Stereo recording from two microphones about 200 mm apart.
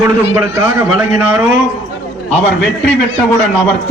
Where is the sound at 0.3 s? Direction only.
15° right (ahead or behind).